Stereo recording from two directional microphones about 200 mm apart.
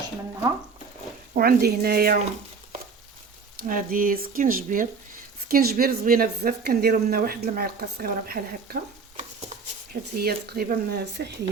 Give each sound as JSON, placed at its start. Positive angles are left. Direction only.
{"t": 1.3, "sound": "speech", "side_deg": -50}
{"t": 3.6, "sound": "speech", "side_deg": -45}